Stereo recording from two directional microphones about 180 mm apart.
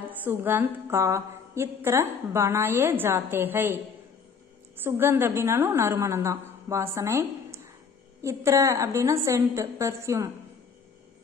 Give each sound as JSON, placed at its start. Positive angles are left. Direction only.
{"t": 0.2, "sound": "a woman's voice", "side_deg": -10}
{"t": 4.8, "sound": "a woman's voice", "side_deg": -15}